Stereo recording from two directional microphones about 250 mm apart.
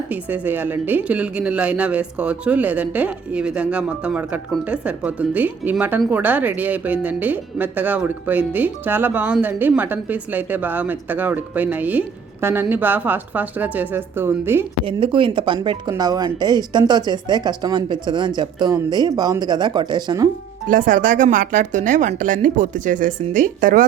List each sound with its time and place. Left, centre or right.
0.1 s speech: centre
14.8 s speech: centre
20.7 s speech: right